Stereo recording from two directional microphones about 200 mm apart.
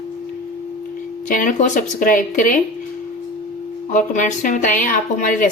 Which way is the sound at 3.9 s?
40° left (ahead or behind).